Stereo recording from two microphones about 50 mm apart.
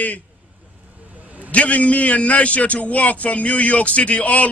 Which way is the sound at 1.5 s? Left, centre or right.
Left.